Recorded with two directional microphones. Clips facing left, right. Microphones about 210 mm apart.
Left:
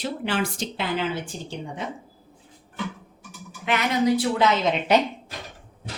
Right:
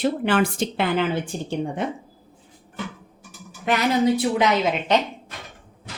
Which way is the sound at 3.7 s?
40° right (ahead or behind).